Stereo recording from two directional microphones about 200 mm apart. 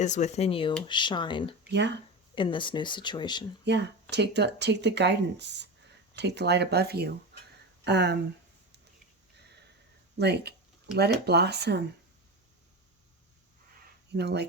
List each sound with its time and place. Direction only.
0.0 s speech: 35° left (ahead or behind)
3.6 s speech: 60° right (ahead or behind)
10.2 s speech: 55° right (ahead or behind)
14.1 s speech: 55° right (ahead or behind)